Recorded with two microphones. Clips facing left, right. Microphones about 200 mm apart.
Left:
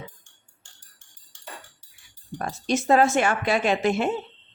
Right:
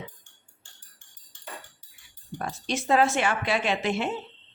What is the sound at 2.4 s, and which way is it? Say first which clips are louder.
A woman's voice: left 5 dB; 45° left (ahead or behind).